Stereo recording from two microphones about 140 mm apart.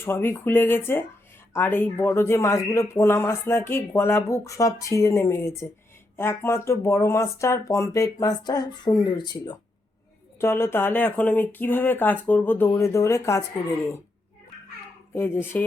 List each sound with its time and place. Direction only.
0.0 s speech: 15° left (ahead or behind)
10.3 s speech: 20° left (ahead or behind)
15.1 s speech: 15° left (ahead or behind)